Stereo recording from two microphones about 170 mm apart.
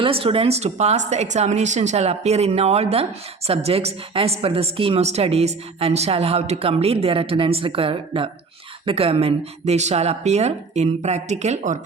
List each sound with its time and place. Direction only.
0.0 s speech: 35° right (ahead or behind)